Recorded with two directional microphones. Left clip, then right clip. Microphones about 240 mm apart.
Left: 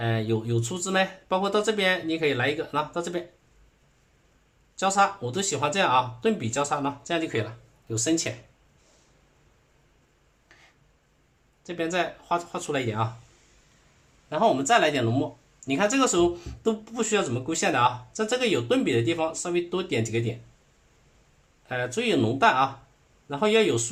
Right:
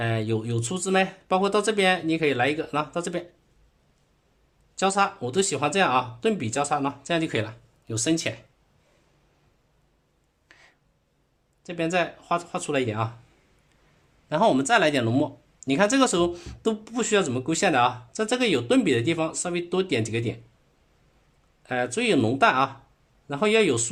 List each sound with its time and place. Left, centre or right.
0.0 s speech: right
4.7 s speech: right
10.5 s a sound: right
11.6 s speech: right
14.3 s speech: right
21.7 s speech: right